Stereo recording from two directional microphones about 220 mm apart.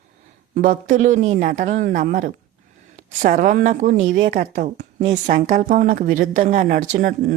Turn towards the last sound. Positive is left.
turn(degrees=-40)  # may be behind; listen again after turning